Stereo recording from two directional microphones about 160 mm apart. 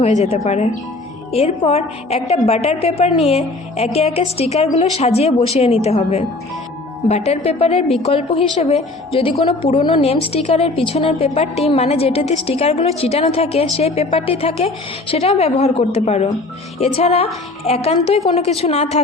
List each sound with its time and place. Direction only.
0.0 s a woman's voice: 40° left (ahead or behind)